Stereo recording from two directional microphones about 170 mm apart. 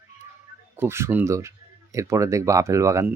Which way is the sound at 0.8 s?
15° right (ahead or behind).